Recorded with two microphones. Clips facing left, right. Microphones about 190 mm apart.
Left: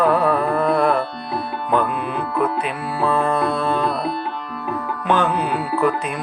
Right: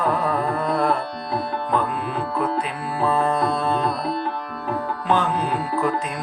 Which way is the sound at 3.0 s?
70° left (ahead or behind).